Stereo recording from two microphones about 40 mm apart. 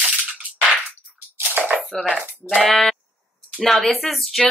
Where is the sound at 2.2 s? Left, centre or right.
Right.